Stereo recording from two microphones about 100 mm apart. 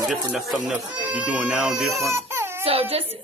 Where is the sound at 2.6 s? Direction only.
80° right.